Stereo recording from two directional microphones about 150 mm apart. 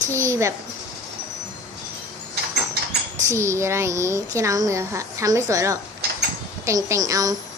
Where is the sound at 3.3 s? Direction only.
20° right (ahead or behind).